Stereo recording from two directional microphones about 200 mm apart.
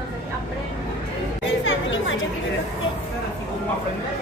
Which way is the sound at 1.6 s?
75° left (ahead or behind).